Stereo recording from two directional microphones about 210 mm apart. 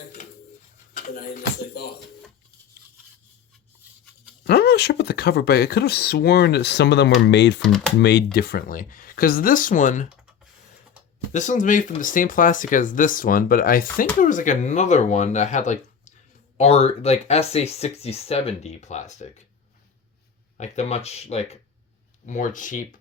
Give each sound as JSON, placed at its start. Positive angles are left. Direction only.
{"t": 0.9, "sound": "a sound", "side_deg": 40}
{"t": 4.4, "sound": "speech", "side_deg": 50}
{"t": 7.6, "sound": "speech", "side_deg": 0}
{"t": 8.0, "sound": "speech", "side_deg": 50}
{"t": 10.1, "sound": "computer keyboard", "side_deg": -5}
{"t": 11.3, "sound": "speech", "side_deg": 35}
{"t": 20.6, "sound": "speech", "side_deg": 30}